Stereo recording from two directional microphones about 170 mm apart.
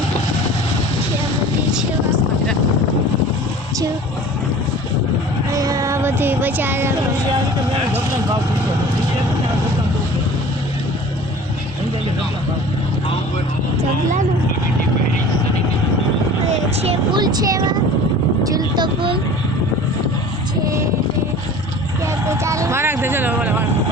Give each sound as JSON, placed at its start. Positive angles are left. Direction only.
{"t": 5.5, "sound": "music", "side_deg": -20}
{"t": 16.8, "sound": "vehicle", "side_deg": -30}
{"t": 18.4, "sound": "a sound", "side_deg": -25}
{"t": 22.3, "sound": "vehicle", "side_deg": -20}